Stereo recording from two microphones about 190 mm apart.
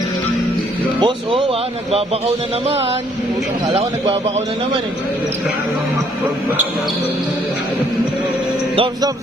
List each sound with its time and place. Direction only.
1.0 s a man's voice: 30° right (ahead or behind)
8.7 s speech: 25° right (ahead or behind)